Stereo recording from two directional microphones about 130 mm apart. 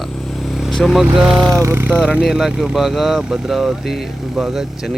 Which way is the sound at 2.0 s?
5° right (ahead or behind).